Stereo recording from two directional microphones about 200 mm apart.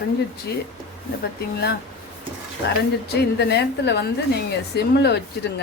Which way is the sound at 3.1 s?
55° left (ahead or behind).